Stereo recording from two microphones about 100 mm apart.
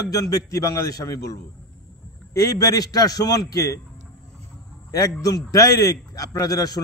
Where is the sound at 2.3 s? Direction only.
40° left (ahead or behind).